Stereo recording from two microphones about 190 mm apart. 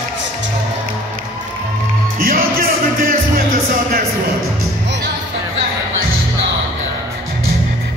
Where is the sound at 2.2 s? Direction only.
50° right (ahead or behind).